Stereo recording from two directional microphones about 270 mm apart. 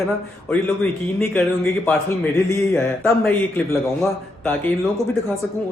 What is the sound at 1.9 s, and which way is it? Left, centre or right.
A man's voice, centre.